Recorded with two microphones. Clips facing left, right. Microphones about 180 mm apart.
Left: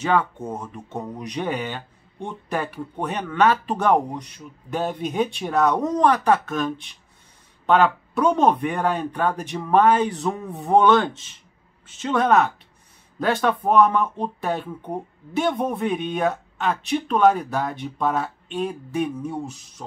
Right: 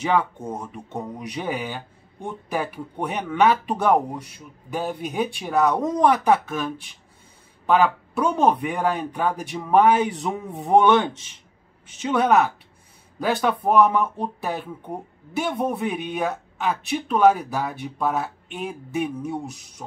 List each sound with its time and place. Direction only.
0.0 s speech: 10° right (ahead or behind)